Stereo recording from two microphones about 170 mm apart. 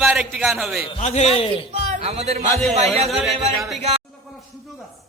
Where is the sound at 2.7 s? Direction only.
40° right (ahead or behind).